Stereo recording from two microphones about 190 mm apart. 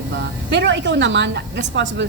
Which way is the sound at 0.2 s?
65° right (ahead or behind).